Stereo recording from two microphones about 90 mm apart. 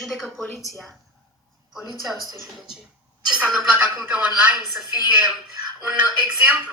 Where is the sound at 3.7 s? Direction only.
15° right (ahead or behind).